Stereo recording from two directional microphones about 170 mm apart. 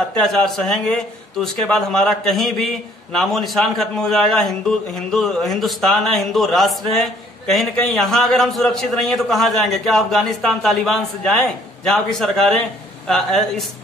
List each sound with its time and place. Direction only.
0.2 s a man's voice: 5° left (ahead or behind)